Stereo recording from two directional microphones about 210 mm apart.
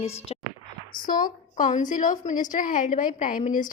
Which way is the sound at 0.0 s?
30° left (ahead or behind).